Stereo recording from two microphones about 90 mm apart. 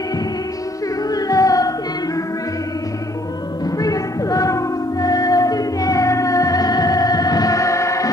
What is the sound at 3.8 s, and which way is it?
Music, 40° left (ahead or behind).